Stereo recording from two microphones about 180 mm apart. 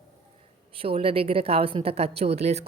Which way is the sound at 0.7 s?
30° right (ahead or behind).